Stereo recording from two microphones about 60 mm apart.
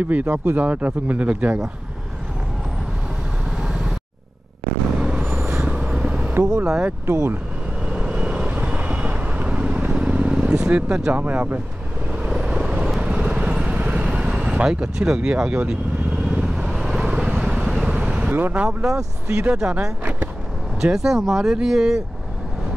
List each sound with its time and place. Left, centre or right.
0.0 s speech: right
3.4 s vehicle: centre
4.9 s vehicle: centre
5.3 s vehicle: right
6.6 s speech: centre
7.1 s speech: right
7.8 s vehicle: centre
11.2 s speech: right
12.1 s vehicle: centre
14.1 s speech: centre
16.3 s vehicle: centre
18.5 s speech: centre
20.9 s speech: centre